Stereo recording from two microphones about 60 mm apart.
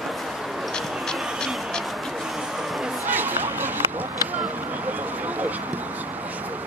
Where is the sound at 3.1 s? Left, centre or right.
Right.